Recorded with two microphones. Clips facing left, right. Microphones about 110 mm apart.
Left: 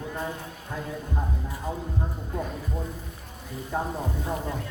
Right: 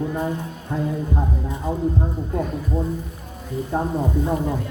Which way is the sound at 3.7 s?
20° right (ahead or behind).